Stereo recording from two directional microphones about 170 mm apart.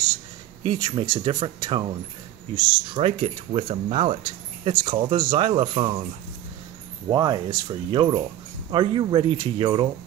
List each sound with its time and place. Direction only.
0.7 s speech: 25° right (ahead or behind)
3.0 s speech: 35° right (ahead or behind)
7.1 s speech: 25° right (ahead or behind)